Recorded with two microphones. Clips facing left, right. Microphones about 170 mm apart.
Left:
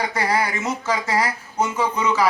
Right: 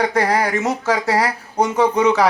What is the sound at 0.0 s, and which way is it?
Speech, 60° right (ahead or behind).